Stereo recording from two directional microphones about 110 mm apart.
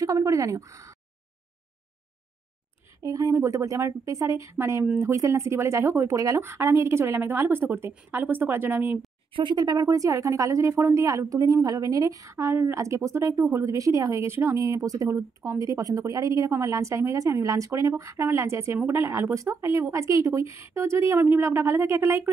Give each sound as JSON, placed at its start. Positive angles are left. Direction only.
{"t": 0.0, "sound": "a sound", "side_deg": -30}
{"t": 3.0, "sound": "a woman's voice", "side_deg": -30}
{"t": 9.3, "sound": "speech", "side_deg": -45}